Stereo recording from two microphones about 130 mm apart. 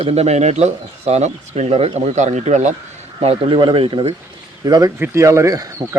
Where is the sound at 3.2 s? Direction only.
45° right (ahead or behind).